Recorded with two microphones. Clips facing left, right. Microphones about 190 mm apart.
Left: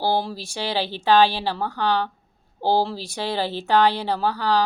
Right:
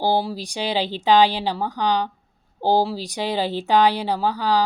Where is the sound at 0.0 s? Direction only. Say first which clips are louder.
Right 2 dB; 15° right (ahead or behind).